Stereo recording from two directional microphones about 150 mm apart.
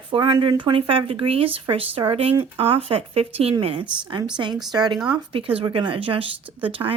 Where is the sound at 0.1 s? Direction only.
30° right (ahead or behind).